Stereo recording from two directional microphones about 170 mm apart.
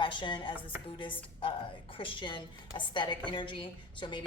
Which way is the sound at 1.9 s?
30° left (ahead or behind).